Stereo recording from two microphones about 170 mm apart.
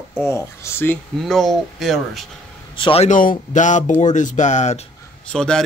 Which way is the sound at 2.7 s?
30° left (ahead or behind).